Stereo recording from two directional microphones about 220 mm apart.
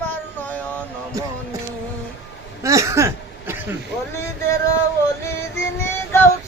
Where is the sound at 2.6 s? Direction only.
15° right (ahead or behind).